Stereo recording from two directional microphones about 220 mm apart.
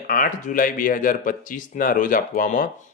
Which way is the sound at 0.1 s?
40° left (ahead or behind).